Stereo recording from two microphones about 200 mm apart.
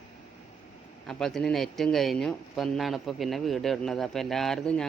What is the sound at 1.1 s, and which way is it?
Speech, centre (ahead or behind).